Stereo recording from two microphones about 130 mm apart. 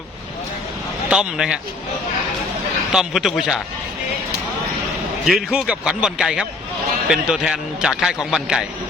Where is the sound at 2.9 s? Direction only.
Centre (ahead or behind).